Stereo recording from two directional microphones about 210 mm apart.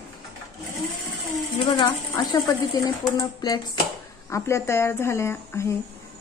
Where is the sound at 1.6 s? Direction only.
20° left (ahead or behind).